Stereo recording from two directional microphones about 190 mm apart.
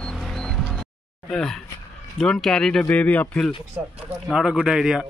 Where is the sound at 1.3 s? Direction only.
5° left (ahead or behind).